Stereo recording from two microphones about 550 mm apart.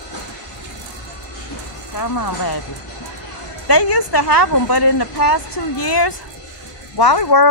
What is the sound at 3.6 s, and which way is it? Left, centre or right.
Speech, left.